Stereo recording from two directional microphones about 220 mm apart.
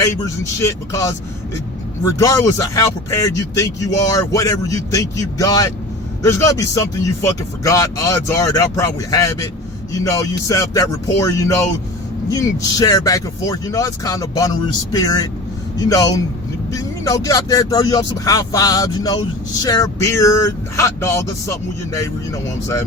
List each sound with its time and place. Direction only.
0.6 s speech: 15° left (ahead or behind)